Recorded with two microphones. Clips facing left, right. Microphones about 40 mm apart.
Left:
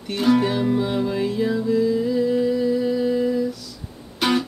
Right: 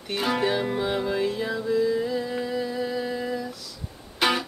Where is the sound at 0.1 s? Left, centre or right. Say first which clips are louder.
Left 5 dB; centre.